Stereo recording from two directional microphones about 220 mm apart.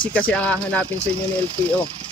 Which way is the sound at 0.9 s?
30° right (ahead or behind).